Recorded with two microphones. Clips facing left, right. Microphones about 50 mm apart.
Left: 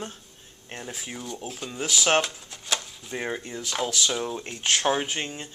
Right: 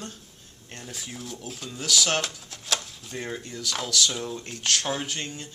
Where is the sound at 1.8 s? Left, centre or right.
Left.